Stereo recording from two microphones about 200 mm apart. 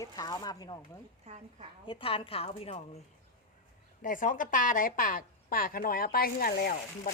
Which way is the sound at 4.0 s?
40° left (ahead or behind).